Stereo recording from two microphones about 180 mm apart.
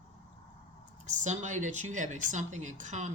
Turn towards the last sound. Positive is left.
turn(degrees=-40)  # may be behind; listen again after turning